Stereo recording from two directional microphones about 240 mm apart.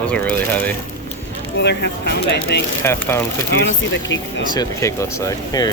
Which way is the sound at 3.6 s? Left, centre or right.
Left.